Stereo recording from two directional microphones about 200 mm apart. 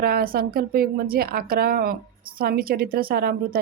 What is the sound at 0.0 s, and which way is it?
Speech, 50° right (ahead or behind).